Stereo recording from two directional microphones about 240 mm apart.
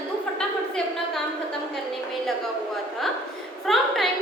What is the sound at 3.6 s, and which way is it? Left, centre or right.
Speech, centre.